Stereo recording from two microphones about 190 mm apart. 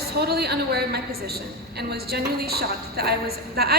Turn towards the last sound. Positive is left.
turn(degrees=-55)  # may be behind; listen again after turning